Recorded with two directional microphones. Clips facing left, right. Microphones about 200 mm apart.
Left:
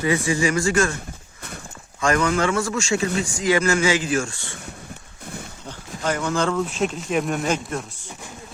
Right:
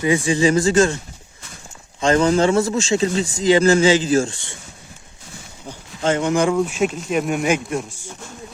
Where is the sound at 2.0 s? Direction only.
25° right (ahead or behind).